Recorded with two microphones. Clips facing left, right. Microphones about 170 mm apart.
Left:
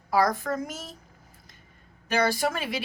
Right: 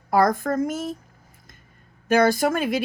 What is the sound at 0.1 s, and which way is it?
Speech, 50° right (ahead or behind).